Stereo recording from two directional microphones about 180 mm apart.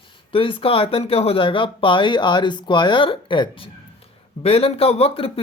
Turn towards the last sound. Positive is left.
turn(degrees=35)  # may be behind; listen again after turning